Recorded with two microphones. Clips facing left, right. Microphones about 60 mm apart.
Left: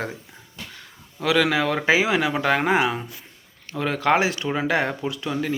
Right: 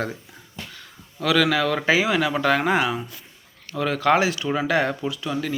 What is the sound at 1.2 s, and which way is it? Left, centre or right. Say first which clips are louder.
Speech: even; left.